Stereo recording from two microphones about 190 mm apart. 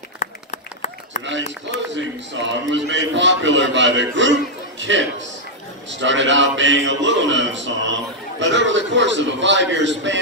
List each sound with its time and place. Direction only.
0.2 s run: 40° left (ahead or behind)
2.0 s a man's voice: 70° right (ahead or behind)